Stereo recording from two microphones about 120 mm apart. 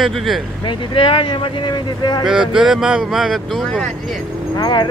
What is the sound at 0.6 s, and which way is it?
Speech, 45° left (ahead or behind).